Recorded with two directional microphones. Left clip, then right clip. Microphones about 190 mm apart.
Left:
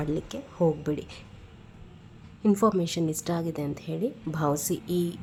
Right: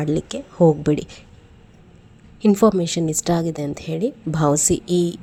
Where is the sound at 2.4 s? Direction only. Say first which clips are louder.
Right 8 dB; 25° right (ahead or behind).